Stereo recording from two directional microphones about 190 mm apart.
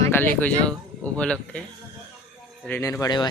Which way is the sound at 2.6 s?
15° left (ahead or behind).